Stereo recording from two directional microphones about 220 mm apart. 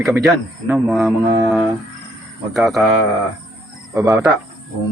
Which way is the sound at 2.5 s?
Centre (ahead or behind).